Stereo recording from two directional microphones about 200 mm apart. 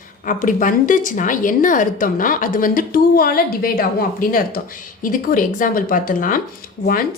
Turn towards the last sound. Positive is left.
turn(degrees=45)  # may be behind; listen again after turning